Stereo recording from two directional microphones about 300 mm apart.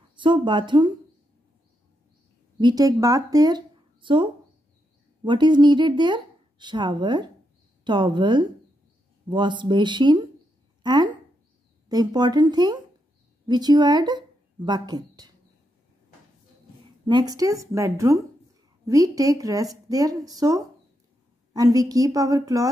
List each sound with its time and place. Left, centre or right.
0.1 s speech: centre
2.6 s a woman's voice: centre
17.0 s speech: centre